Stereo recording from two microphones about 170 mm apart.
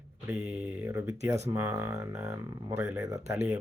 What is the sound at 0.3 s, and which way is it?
Speech, 10° right (ahead or behind).